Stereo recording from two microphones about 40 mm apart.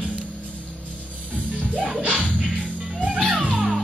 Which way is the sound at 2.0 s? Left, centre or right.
Right.